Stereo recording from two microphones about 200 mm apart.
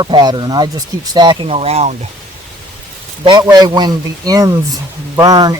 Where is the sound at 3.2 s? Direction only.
20° right (ahead or behind).